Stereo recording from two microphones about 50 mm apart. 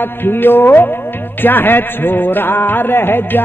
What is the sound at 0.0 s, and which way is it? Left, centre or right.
Music, left.